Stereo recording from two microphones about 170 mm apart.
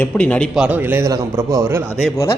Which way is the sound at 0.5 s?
10° right (ahead or behind).